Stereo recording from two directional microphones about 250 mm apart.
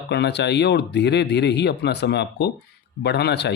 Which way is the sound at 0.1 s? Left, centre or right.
Left.